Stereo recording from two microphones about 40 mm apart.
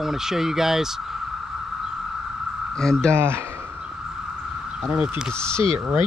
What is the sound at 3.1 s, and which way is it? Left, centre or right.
Speech, right.